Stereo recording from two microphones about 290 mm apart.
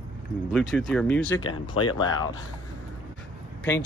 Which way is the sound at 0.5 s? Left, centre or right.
Centre.